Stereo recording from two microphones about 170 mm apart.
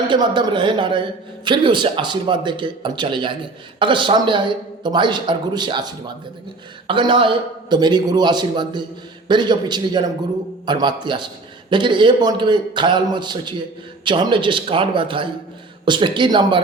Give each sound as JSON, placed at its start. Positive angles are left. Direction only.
{"t": 0.1, "sound": "speech", "side_deg": -25}